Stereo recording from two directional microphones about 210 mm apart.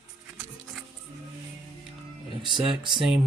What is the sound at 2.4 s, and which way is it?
Speech, centre (ahead or behind).